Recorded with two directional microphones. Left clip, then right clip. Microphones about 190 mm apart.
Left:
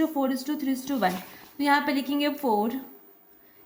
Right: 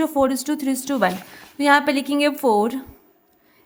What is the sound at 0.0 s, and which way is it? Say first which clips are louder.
A woman's voice: right 7 dB; 40° right (ahead or behind).